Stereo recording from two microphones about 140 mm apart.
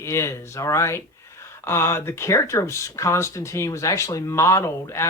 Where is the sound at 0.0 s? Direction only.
20° left (ahead or behind).